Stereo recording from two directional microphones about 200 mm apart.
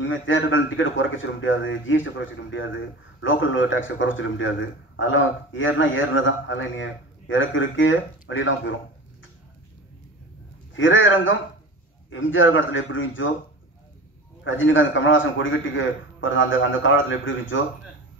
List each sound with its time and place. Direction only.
0.0 s a man's voice: 70° left (ahead or behind)
10.8 s a man's voice: 75° left (ahead or behind)
14.4 s a man's voice: 75° left (ahead or behind)